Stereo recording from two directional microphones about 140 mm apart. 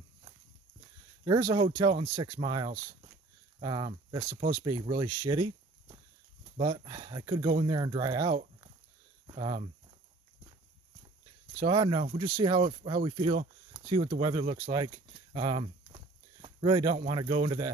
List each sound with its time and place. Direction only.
1.2 s speech: 30° right (ahead or behind)
11.6 s speech: 35° right (ahead or behind)
15.3 s a sound: 40° right (ahead or behind)
17.1 s speech: 40° right (ahead or behind)